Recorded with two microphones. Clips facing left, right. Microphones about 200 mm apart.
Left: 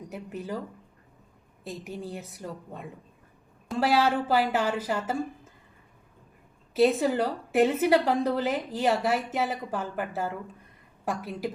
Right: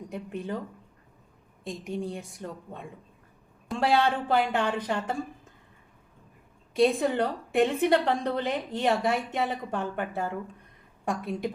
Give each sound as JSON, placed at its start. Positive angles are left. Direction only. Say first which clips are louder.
{"t": 0.1, "sound": "a woman's voice", "louder": "right 1 dB", "side_deg": 5}
{"t": 1.6, "sound": "a woman's voice", "louder": "right 3 dB", "side_deg": 5}
{"t": 6.7, "sound": "a woman's voice", "louder": "left 1 dB", "side_deg": 5}